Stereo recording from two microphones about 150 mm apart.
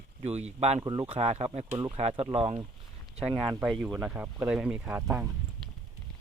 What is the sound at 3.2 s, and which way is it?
Speech, 5° right (ahead or behind).